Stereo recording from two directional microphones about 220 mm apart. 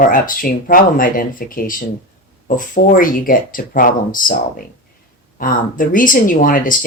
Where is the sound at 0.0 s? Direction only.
40° left (ahead or behind).